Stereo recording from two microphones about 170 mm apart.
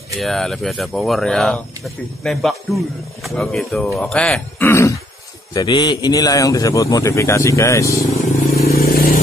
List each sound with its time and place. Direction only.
0.2 s a man's voice: centre (ahead or behind); by 8.0 s 20° left (ahead or behind)
8.5 s vehicle: 65° left (ahead or behind)